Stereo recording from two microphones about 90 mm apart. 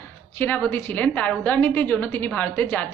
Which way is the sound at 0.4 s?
20° left (ahead or behind).